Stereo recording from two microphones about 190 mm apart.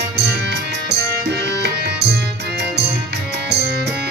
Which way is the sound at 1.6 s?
60° right (ahead or behind).